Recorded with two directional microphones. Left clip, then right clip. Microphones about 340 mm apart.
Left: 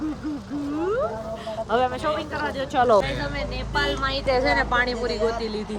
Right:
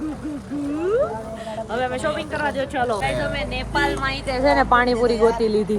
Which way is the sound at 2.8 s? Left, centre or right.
Left.